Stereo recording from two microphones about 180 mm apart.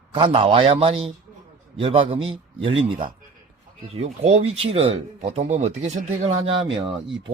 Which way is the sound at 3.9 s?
35° right (ahead or behind).